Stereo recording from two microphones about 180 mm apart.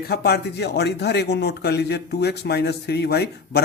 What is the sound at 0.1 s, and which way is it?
Speech, 65° left (ahead or behind).